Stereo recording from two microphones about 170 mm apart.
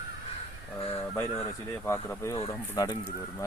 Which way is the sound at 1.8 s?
15° left (ahead or behind).